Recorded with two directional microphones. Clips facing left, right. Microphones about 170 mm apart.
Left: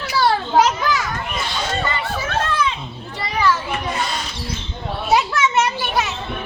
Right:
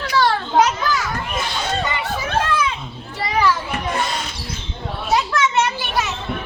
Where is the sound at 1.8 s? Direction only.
15° right (ahead or behind).